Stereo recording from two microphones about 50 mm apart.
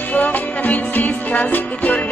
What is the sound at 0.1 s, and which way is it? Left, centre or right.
Music, left.